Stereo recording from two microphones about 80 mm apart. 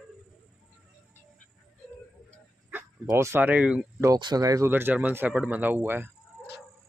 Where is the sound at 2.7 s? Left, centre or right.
Right.